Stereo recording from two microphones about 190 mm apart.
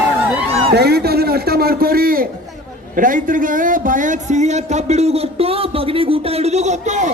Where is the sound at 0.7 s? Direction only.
55° right (ahead or behind).